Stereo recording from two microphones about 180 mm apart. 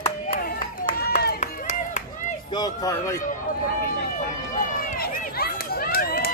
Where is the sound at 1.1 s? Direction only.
60° left (ahead or behind).